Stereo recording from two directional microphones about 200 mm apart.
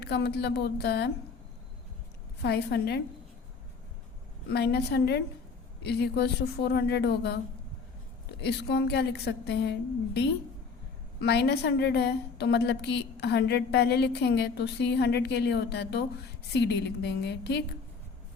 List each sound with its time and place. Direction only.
0.0 s a woman's voice: 55° left (ahead or behind)
2.4 s a woman's voice: 55° left (ahead or behind)
4.5 s a woman's voice: 55° left (ahead or behind)
8.4 s a woman's voice: 55° left (ahead or behind)
11.2 s a woman's voice: 55° left (ahead or behind)